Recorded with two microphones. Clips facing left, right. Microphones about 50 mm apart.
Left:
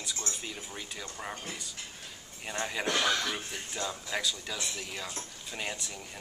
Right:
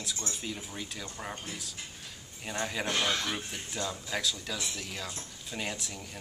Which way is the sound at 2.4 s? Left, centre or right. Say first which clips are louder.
Even; centre.